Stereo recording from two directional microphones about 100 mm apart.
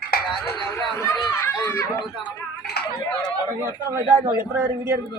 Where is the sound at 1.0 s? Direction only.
25° left (ahead or behind).